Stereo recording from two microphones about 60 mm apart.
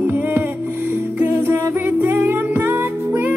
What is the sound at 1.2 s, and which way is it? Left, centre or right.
Music, right.